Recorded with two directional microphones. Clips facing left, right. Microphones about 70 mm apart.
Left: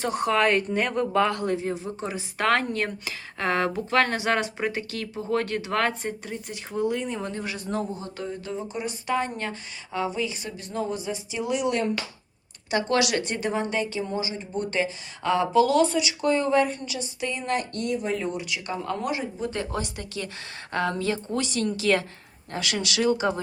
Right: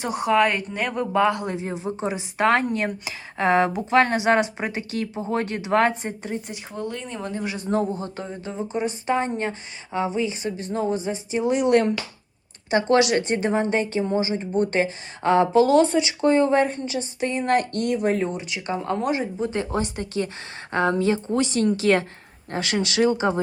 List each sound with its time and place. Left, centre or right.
0.0 s a woman's voice: centre; by 6.6 s right
6.7 s speech: centre
7.3 s a woman's voice: right
12.7 s speech: right
18.2 s a woman's voice: right